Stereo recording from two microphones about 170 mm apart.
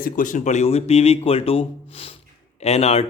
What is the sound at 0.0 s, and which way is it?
Speech, 50° left (ahead or behind).